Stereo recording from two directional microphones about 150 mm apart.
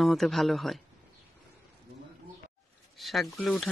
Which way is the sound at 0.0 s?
Centre (ahead or behind).